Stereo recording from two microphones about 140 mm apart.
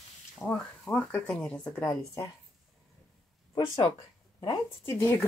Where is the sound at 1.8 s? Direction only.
25° left (ahead or behind).